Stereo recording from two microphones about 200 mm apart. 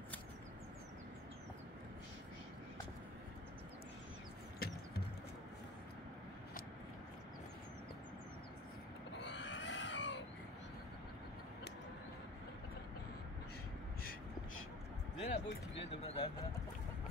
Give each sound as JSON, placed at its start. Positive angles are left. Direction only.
{"t": 4.6, "sound": "music", "side_deg": 50}
{"t": 9.2, "sound": "pig", "side_deg": 60}
{"t": 15.1, "sound": "music", "side_deg": 30}
{"t": 15.7, "sound": "speech", "side_deg": 30}